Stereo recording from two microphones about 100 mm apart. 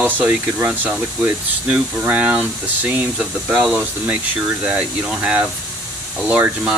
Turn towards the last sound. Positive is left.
turn(degrees=-15)  # may be behind; listen again after turning